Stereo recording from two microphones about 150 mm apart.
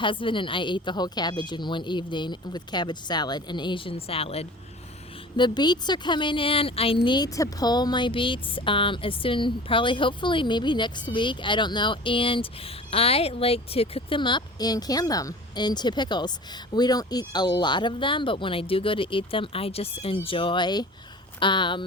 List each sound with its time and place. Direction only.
0.0 s a woman's voice: 35° left (ahead or behind)
5.4 s a woman's voice: 30° left (ahead or behind)